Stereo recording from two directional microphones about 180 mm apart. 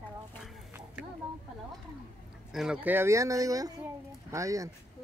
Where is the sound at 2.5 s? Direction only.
5° right (ahead or behind).